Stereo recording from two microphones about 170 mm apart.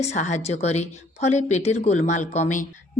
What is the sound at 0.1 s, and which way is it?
A woman's voice, 45° left (ahead or behind).